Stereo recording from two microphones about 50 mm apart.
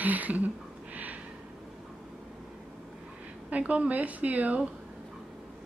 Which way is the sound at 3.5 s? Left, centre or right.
Right.